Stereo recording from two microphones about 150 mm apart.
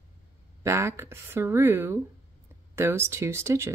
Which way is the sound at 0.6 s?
20° right (ahead or behind).